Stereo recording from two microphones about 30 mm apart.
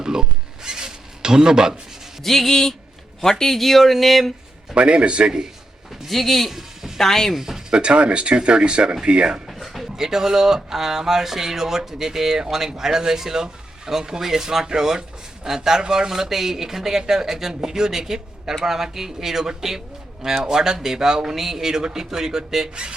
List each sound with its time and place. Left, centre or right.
0.0 s zipper: right
2.2 s speech: centre
4.7 s speech: right
6.1 s speech: centre
6.5 s music: centre
7.0 s speech: centre
7.3 s speech: centre
7.7 s speech: right
10.0 s a man's voice: centre
22.7 s speech: right